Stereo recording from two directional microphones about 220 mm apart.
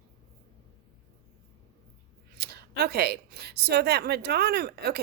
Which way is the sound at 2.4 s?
45° right (ahead or behind).